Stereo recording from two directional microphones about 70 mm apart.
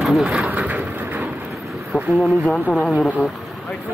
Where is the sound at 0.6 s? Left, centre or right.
Right.